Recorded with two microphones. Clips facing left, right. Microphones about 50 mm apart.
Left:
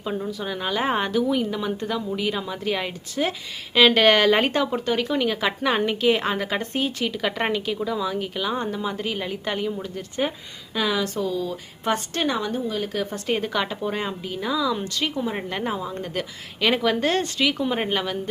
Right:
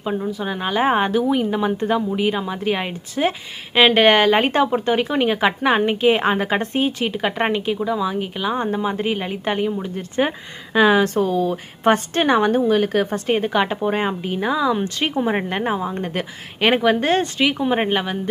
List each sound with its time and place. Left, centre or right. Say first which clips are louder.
0.0 s speech: right 4 dB; centre
8.7 s a woman's voice: right 6 dB; right